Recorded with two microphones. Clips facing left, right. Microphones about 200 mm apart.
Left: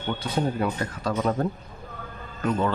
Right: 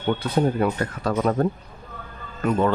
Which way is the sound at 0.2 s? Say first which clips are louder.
Right 5 dB; 55° right (ahead or behind).